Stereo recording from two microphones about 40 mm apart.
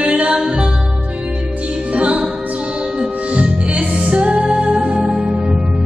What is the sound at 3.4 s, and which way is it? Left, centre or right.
Music, right.